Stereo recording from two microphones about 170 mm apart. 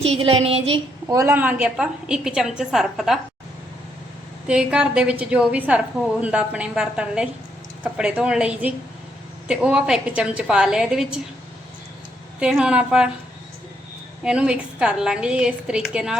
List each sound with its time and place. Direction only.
0.0 s child singing: 35° right (ahead or behind)
1.0 s a woman's voice: 15° right (ahead or behind); by 3.2 s centre (ahead or behind)
4.4 s a woman's voice: 5° right (ahead or behind)
12.4 s a woman's voice: 5° right (ahead or behind)
14.3 s a woman's voice: 5° right (ahead or behind)